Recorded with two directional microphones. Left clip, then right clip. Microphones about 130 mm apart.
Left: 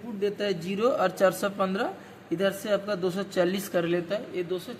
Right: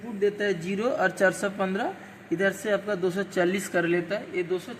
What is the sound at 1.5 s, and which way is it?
Speech, 15° left (ahead or behind).